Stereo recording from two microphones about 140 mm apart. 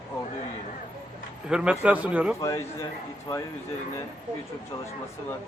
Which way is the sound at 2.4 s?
20° left (ahead or behind).